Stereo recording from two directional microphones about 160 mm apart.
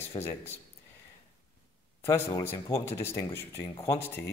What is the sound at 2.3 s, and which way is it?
Speech, 20° left (ahead or behind).